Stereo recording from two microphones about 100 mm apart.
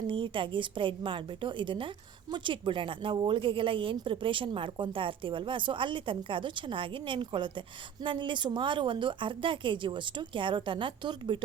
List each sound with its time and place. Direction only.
0.1 s a woman's voice: 60° right (ahead or behind)